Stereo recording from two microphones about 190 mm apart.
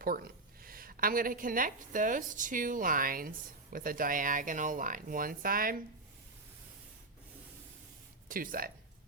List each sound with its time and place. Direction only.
0.6 s a woman's voice: 50° right (ahead or behind)
8.3 s a woman's voice: 50° right (ahead or behind)